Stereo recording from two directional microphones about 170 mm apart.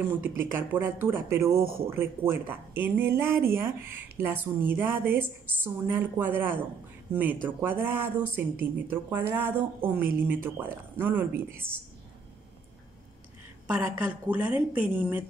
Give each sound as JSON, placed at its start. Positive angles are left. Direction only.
{"t": 0.0, "sound": "speech", "side_deg": -10}
{"t": 1.6, "sound": "a man's voice", "side_deg": -60}
{"t": 1.9, "sound": "speech", "side_deg": -15}
{"t": 13.7, "sound": "speech", "side_deg": -10}